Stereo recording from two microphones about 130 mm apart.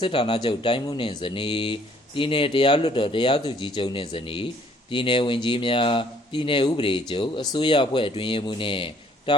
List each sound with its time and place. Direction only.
0.0 s speech: 40° left (ahead or behind)